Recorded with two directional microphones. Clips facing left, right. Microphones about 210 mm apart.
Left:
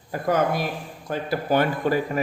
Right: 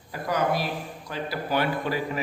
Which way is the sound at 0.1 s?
50° left (ahead or behind).